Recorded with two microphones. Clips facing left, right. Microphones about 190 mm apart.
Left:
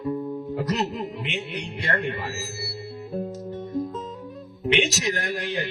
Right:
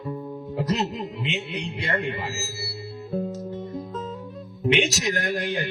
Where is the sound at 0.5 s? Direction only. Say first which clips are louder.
Right 2 dB; 25° right (ahead or behind).